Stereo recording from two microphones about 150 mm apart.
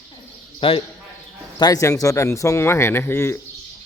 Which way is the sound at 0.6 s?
40° left (ahead or behind).